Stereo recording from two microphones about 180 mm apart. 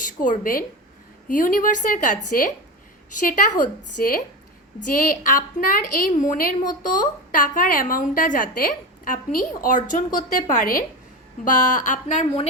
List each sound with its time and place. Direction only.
0.0 s speech: 50° left (ahead or behind)
3.6 s speech: 50° left (ahead or behind)